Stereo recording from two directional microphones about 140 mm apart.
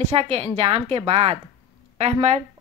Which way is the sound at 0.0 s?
45° right (ahead or behind).